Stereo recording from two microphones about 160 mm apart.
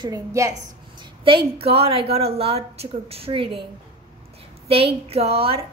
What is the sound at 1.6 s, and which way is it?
A woman's voice, 40° right (ahead or behind).